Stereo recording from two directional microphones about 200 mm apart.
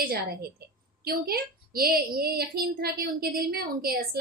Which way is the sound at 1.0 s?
50° right (ahead or behind).